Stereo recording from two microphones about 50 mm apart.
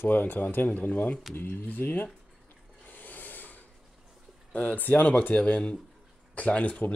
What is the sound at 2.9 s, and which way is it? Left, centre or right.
Rub, left.